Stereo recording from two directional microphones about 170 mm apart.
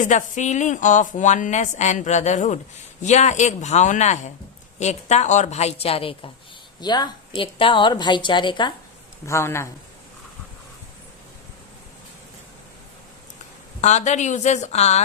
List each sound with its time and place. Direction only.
0.0 s a woman's voice: 45° left (ahead or behind); by 8.7 s 25° left (ahead or behind)
9.2 s a man's voice: 15° left (ahead or behind)
13.8 s a woman's voice: 40° left (ahead or behind)